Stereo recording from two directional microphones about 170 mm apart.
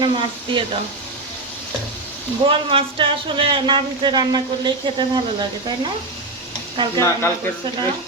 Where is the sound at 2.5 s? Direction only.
30° right (ahead or behind).